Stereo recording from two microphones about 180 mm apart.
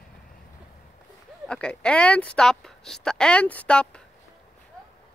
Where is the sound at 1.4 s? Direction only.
5° left (ahead or behind).